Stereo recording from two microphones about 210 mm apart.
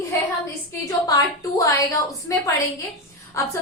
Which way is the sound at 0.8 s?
15° left (ahead or behind).